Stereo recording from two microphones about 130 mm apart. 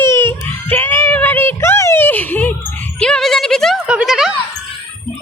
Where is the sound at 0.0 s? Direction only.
15° left (ahead or behind).